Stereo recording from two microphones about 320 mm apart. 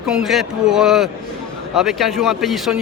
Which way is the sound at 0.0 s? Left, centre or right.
Centre.